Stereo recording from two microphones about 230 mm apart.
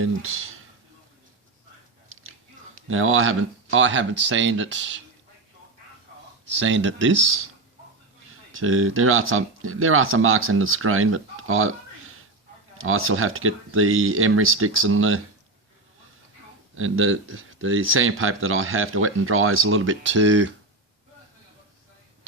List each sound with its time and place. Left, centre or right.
0.0 s speech: right
2.8 s speech: right
6.5 s speech: right
8.5 s speech: right
16.7 s speech: right